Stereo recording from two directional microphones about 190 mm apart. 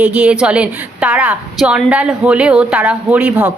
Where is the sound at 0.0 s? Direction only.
5° right (ahead or behind).